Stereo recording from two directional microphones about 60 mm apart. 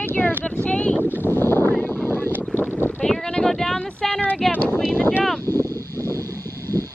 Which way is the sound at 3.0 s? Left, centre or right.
Centre.